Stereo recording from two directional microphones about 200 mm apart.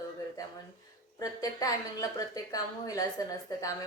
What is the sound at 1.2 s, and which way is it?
A woman's voice, 20° left (ahead or behind).